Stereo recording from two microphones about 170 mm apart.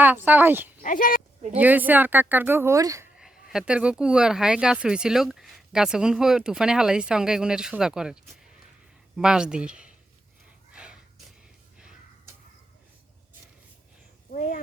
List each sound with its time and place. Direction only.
0.0 s speech: 10° right (ahead or behind)
0.8 s speech: 50° left (ahead or behind)
1.5 s speech: 10° right (ahead or behind)
3.2 s speech: 5° right (ahead or behind)
10.7 s a sound: 5° right (ahead or behind)
14.3 s speech: 55° left (ahead or behind)